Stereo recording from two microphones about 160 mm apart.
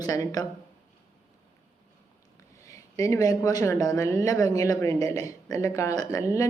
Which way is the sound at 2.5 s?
20° left (ahead or behind).